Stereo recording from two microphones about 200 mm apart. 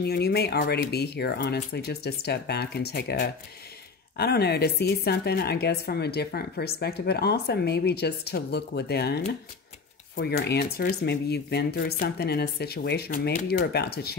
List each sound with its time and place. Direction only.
0.0 s speech: 55° left (ahead or behind)